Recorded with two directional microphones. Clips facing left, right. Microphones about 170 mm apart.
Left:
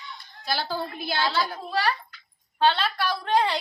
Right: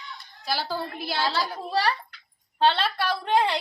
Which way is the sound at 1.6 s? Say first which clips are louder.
Right 1 dB; 35° right (ahead or behind).